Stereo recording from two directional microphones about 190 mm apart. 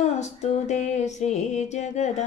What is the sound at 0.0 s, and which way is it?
Music, 35° left (ahead or behind).